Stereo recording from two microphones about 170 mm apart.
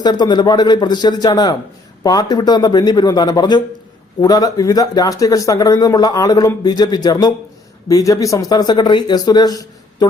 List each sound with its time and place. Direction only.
0.0 s speech: 25° left (ahead or behind)